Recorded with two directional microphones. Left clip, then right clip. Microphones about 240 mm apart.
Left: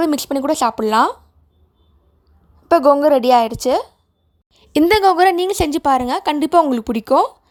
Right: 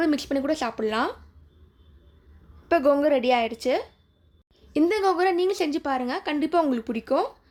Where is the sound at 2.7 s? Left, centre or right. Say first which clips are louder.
Left 9 dB; left.